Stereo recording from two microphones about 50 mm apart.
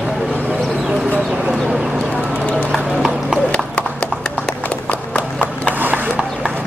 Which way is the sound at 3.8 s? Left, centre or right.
Left.